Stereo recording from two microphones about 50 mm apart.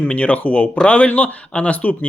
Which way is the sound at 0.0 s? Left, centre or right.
Left.